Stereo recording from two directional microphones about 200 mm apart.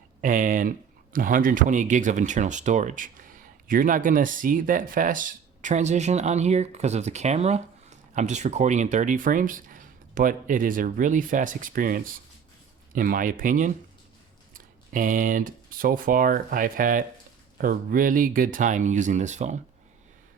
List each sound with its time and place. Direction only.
0.2 s speech: 40° right (ahead or behind)